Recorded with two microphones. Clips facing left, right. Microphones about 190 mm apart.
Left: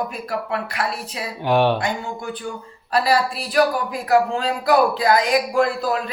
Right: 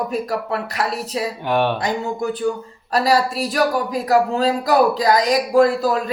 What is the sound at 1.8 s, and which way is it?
Speech, 40° right (ahead or behind).